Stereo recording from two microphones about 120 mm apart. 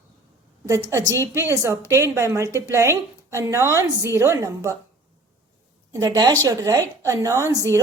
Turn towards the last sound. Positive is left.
turn(degrees=-25)  # may be behind; listen again after turning